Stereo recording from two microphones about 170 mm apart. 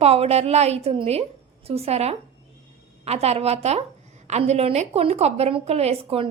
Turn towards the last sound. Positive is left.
turn(degrees=-35)  # may be behind; listen again after turning